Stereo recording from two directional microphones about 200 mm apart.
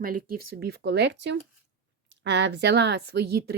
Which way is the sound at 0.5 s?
55° right (ahead or behind).